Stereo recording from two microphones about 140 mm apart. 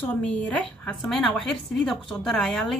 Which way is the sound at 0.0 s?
10° left (ahead or behind).